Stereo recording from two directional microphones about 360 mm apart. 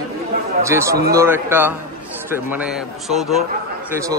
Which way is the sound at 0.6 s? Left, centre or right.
Centre.